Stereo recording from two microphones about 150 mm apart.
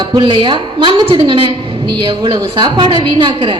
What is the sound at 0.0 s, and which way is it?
A woman's voice, 35° right (ahead or behind).